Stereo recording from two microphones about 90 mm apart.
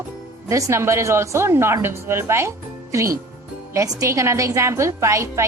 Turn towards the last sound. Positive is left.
turn(degrees=-35)  # may be behind; listen again after turning